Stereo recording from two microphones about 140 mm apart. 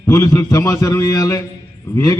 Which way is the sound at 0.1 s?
20° left (ahead or behind).